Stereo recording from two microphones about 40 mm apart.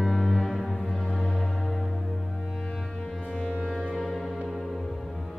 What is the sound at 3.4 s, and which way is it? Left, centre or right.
Music, centre.